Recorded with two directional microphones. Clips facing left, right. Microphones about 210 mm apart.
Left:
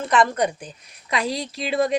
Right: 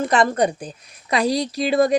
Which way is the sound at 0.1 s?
35° right (ahead or behind).